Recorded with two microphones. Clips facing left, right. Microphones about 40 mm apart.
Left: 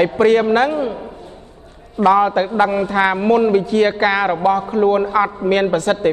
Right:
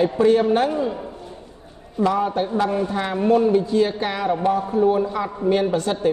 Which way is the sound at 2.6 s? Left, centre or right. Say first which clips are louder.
Left 7 dB; left.